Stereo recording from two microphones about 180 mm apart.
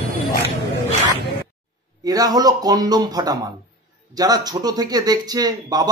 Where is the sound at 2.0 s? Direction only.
20° right (ahead or behind).